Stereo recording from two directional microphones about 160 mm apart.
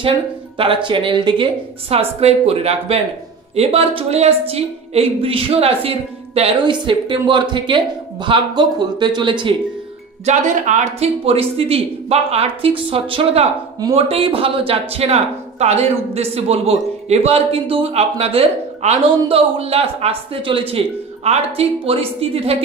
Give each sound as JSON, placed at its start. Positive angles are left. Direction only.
{"t": 0.8, "sound": "speech", "side_deg": -30}
{"t": 10.2, "sound": "speech", "side_deg": -50}